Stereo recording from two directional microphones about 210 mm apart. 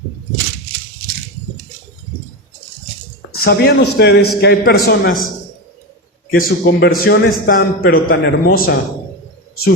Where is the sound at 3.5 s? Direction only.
50° left (ahead or behind).